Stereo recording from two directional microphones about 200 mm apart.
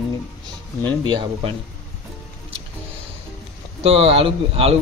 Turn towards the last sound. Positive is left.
turn(degrees=-30)  # may be behind; listen again after turning